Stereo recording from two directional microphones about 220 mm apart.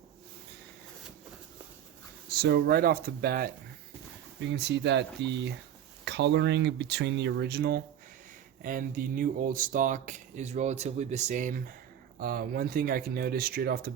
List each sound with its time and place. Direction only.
2.3 s speech: 45° right (ahead or behind)